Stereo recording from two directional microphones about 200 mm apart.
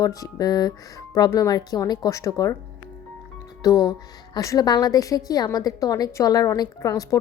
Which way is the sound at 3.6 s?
20° left (ahead or behind).